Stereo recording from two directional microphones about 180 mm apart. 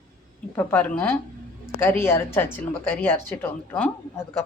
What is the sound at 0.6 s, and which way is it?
Speech, 10° left (ahead or behind).